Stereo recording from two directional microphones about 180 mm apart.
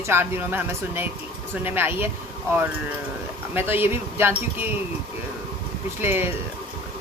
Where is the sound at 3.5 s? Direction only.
10° right (ahead or behind).